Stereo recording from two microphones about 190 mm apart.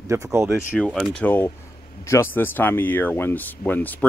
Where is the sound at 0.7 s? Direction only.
5° left (ahead or behind).